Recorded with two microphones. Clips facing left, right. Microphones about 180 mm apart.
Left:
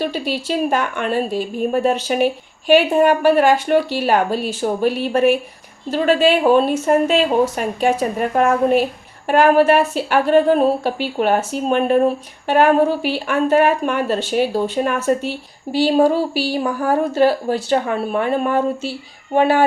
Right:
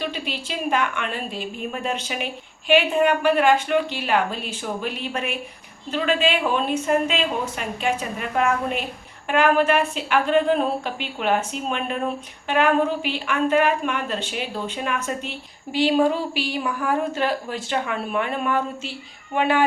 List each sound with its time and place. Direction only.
0.0 s a woman's voice: 40° left (ahead or behind)